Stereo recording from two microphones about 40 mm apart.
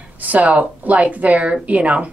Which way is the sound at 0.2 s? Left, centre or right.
Right.